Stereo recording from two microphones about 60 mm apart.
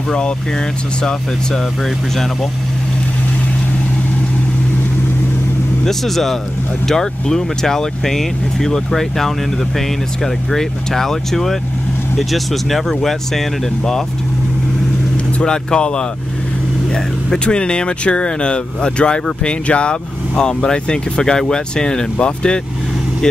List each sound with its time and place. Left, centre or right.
5.9 s speech: centre
15.3 s speech: centre